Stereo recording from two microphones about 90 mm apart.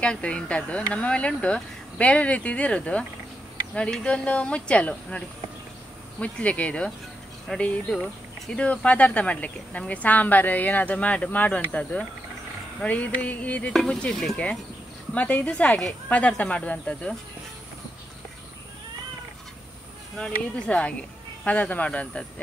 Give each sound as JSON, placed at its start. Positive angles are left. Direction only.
{"t": 0.0, "sound": "speech", "side_deg": 10}
{"t": 15.1, "sound": "speech", "side_deg": 15}
{"t": 20.2, "sound": "speech", "side_deg": 10}